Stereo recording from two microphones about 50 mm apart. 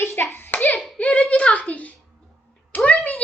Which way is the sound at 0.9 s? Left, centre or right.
Left.